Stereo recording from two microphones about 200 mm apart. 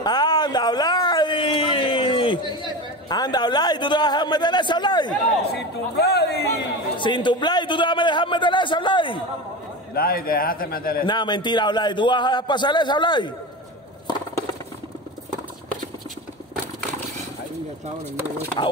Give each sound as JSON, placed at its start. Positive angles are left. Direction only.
{"t": 0.0, "sound": "a sound", "side_deg": 20}
{"t": 5.5, "sound": "a man's voice", "side_deg": 55}
{"t": 7.0, "sound": "a man's voice", "side_deg": 25}
{"t": 9.9, "sound": "a man's voice", "side_deg": 50}
{"t": 11.1, "sound": "a man's voice", "side_deg": 20}